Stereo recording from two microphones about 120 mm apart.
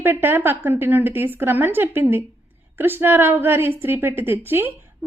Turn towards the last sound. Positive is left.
turn(degrees=-20)  # may be behind; listen again after turning